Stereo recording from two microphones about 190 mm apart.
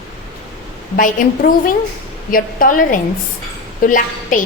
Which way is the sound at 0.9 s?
45° left (ahead or behind).